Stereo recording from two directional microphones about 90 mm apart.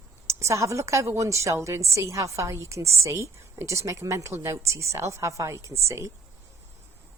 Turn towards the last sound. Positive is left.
turn(degrees=-35)  # may be behind; listen again after turning